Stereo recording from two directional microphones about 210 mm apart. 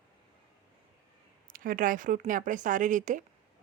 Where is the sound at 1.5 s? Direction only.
40° right (ahead or behind).